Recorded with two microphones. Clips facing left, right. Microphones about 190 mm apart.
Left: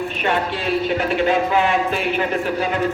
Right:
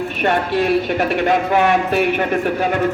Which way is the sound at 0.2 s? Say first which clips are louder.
Right 6 dB; 60° right (ahead or behind).